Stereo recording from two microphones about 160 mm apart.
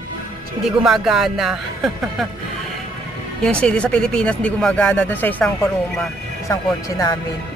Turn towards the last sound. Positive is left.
turn(degrees=20)  # may be behind; listen again after turning